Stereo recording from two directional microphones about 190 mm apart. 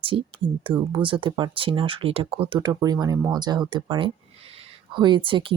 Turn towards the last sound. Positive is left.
turn(degrees=-25)  # may be behind; listen again after turning